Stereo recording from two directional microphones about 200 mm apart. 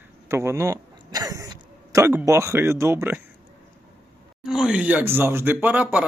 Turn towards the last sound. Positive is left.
turn(degrees=-5)  # may be behind; listen again after turning